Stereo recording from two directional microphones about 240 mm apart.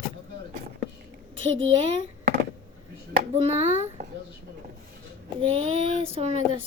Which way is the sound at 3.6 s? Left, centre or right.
Left.